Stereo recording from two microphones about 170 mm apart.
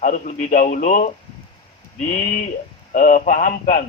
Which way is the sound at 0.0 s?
45° left (ahead or behind).